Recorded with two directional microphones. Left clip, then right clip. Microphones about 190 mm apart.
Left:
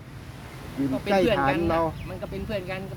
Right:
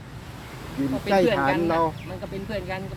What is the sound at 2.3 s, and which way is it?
Speech, 25° left (ahead or behind).